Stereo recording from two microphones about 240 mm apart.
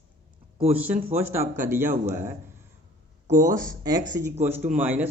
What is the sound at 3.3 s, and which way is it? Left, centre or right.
Speech, centre.